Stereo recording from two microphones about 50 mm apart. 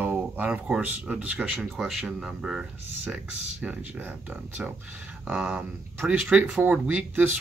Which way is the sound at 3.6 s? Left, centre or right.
Right.